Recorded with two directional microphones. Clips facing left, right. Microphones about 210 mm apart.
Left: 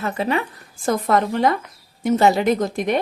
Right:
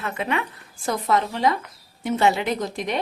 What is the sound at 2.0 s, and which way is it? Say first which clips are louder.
Speech: left 5 dB; 40° left (ahead or behind).